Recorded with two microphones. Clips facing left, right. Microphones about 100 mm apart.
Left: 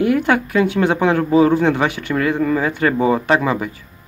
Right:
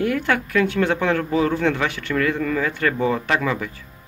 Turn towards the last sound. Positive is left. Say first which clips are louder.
# left 5 dB
turn(degrees=25)  # may be behind; listen again after turning